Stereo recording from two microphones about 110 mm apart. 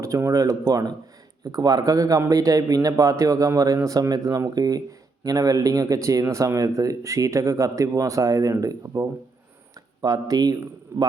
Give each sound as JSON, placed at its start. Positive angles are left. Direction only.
{"t": 0.0, "sound": "speech", "side_deg": -30}